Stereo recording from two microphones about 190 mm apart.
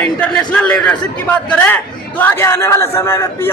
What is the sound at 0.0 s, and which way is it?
A man's voice, 5° left (ahead or behind).